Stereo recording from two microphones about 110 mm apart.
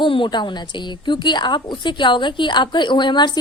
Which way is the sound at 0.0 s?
50° left (ahead or behind).